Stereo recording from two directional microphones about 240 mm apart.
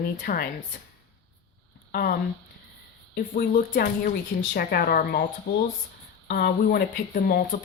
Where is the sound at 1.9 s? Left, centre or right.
Left.